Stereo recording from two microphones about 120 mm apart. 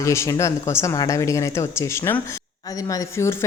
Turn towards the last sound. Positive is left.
turn(degrees=25)  # may be behind; listen again after turning